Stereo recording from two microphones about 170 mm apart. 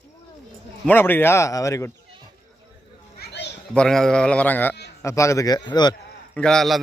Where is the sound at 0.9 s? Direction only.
10° left (ahead or behind).